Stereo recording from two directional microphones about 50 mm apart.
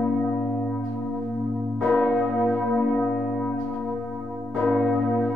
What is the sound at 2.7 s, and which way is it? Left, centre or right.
Music, centre.